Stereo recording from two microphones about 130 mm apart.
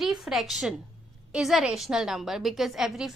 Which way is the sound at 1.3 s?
5° right (ahead or behind).